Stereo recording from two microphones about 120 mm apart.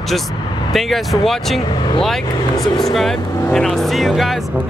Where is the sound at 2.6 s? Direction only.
Centre (ahead or behind).